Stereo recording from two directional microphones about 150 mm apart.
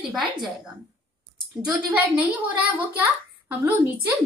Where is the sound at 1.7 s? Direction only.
10° right (ahead or behind).